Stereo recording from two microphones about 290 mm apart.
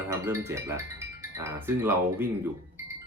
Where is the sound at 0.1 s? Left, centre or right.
Centre.